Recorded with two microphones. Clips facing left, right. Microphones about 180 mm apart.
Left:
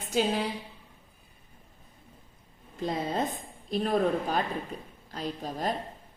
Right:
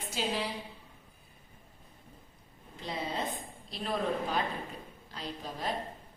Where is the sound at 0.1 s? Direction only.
50° left (ahead or behind).